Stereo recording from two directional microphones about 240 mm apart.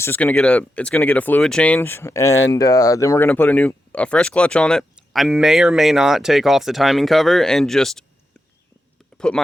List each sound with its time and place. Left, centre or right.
0.0 s speech: centre
9.1 s speech: centre